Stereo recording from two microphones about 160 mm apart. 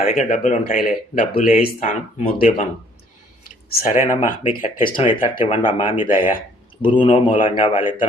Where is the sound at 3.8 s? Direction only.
55° left (ahead or behind).